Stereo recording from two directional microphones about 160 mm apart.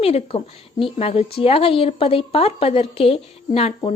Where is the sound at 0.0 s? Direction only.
40° left (ahead or behind).